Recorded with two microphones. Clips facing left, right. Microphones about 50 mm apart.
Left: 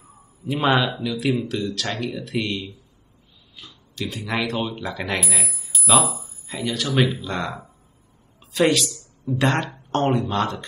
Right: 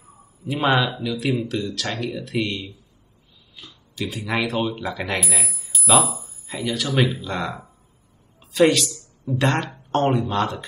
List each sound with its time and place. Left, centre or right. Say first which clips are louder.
0.5 s speech: even; centre
4.0 s speech: right 1 dB; centre
4.6 s speech: right 2 dB; centre
4.8 s speech: even; centre